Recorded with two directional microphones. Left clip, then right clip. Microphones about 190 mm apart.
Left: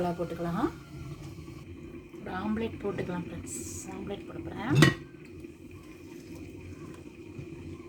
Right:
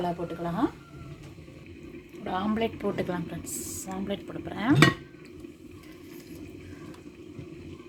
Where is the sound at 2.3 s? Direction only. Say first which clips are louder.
Right 5 dB; 50° right (ahead or behind).